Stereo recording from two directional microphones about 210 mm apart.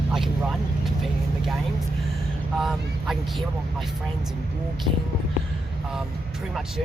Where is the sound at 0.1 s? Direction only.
Centre (ahead or behind).